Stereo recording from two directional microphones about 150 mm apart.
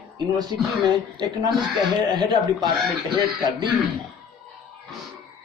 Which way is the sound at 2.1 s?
30° right (ahead or behind).